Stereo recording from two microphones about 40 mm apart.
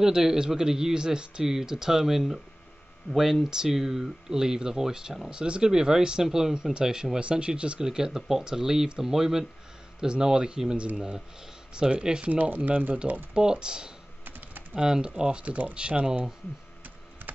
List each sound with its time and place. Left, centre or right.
0.0 s speech: centre
7.8 s speech: centre
9.9 s speech: right
12.3 s speech: right
12.9 s speech: right
14.2 s typing: right
14.8 s speech: right
15.4 s speech: right